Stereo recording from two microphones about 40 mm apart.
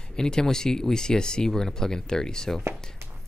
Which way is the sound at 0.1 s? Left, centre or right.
Centre.